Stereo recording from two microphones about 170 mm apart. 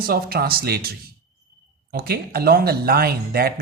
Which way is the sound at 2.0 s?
65° right (ahead or behind).